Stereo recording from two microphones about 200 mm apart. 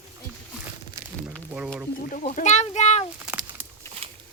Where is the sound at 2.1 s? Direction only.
40° left (ahead or behind).